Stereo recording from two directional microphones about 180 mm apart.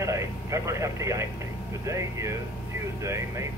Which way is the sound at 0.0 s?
15° right (ahead or behind).